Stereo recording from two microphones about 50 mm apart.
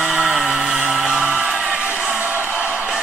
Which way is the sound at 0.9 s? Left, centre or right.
Centre.